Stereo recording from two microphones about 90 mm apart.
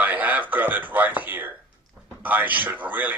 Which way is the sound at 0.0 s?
20° right (ahead or behind).